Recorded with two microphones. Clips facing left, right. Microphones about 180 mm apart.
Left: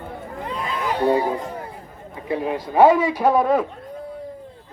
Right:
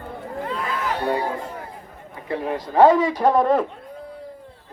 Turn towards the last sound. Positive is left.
turn(degrees=5)  # may be behind; listen again after turning